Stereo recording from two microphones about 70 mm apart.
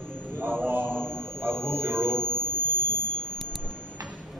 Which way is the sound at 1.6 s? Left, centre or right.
Right.